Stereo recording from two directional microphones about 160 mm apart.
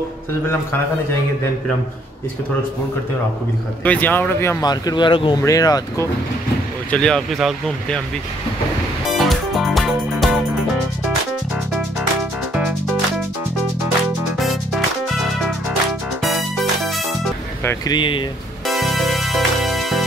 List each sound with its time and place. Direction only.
3.8 s speech: 10° left (ahead or behind)
6.9 s speech: 5° left (ahead or behind)
9.1 s music: centre (ahead or behind)
16.2 s music: centre (ahead or behind)
17.6 s speech: 25° left (ahead or behind)
18.7 s music: centre (ahead or behind)